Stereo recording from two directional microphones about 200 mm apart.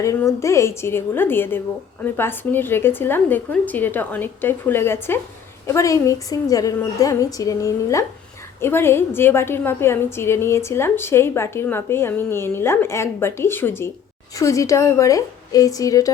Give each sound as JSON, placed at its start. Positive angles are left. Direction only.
{"t": 0.0, "sound": "a woman's voice", "side_deg": 15}